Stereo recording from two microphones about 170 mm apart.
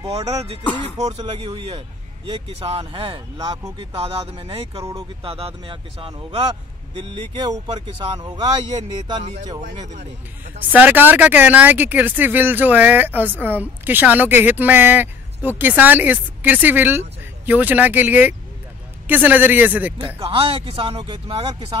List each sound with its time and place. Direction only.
0.9 s speech: 30° right (ahead or behind)
3.9 s a man's voice: 35° right (ahead or behind)
4.7 s speech: 20° right (ahead or behind)
5.2 s a man's voice: 35° right (ahead or behind)
9.2 s a man's voice: 40° right (ahead or behind)
10.7 s speech: 10° right (ahead or behind)
20.2 s a man's voice: 30° right (ahead or behind)